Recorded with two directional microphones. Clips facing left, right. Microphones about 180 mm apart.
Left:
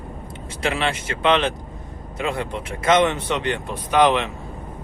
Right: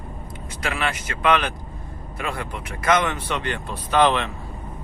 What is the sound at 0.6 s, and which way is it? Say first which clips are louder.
Speech: left 3 dB; 25° left (ahead or behind).